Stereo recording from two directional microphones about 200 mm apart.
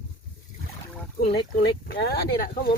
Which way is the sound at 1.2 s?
50° left (ahead or behind).